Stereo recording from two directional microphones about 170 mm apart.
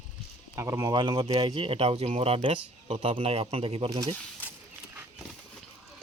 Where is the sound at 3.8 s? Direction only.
20° right (ahead or behind).